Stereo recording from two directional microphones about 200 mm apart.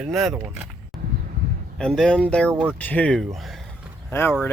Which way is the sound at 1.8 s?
5° left (ahead or behind).